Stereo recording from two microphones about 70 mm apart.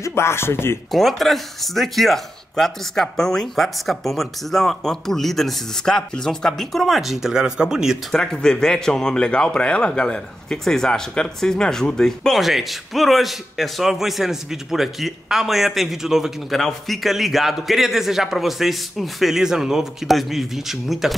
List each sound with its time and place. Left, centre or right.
0.0 s speech: left
0.9 s speech: centre
8.1 s speech: centre
12.4 s speech: centre